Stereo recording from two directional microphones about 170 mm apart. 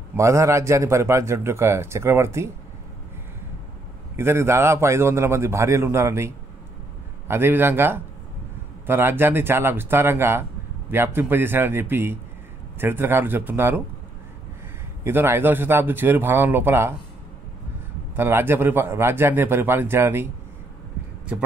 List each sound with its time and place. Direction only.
0.1 s a man's voice: 15° right (ahead or behind)
4.2 s a man's voice: 15° right (ahead or behind)
15.0 s a man's voice: 15° right (ahead or behind)
18.1 s a man's voice: 15° right (ahead or behind)